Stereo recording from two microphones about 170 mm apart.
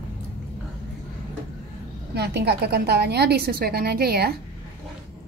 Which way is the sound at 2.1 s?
70° right (ahead or behind).